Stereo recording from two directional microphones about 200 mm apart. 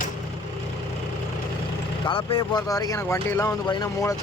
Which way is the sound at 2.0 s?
25° left (ahead or behind).